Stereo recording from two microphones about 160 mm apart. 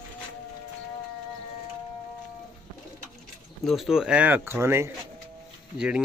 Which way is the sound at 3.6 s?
Centre (ahead or behind).